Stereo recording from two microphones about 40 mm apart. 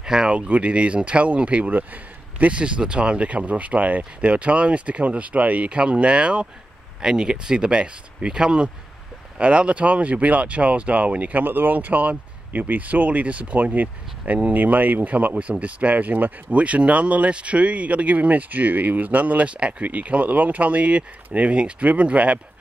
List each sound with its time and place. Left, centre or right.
0.0 s speech: centre
0.3 s a man's voice: right
2.6 s speech: right